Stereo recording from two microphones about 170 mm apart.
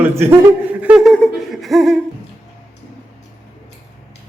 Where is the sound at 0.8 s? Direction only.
5° right (ahead or behind).